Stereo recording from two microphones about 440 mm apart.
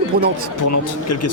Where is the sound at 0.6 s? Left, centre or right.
Left.